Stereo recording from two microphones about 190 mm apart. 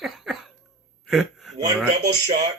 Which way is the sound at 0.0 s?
Centre (ahead or behind).